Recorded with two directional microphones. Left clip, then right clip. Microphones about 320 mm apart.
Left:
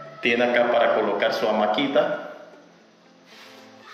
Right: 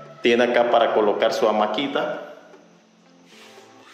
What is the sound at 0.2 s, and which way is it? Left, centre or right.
A man's voice, centre.